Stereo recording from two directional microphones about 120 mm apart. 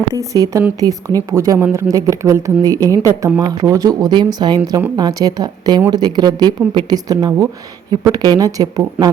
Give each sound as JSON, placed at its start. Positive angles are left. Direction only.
{"t": 0.1, "sound": "speech", "side_deg": -25}